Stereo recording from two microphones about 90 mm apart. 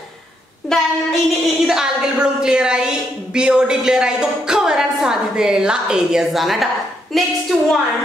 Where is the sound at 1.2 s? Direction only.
5° right (ahead or behind).